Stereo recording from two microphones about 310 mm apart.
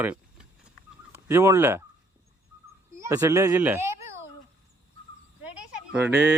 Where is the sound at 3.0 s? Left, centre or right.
Centre.